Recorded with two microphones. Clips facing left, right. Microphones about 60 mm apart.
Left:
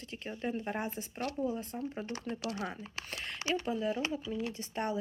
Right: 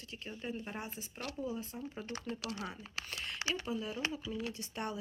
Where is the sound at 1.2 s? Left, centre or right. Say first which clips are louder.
Left 5 dB; left.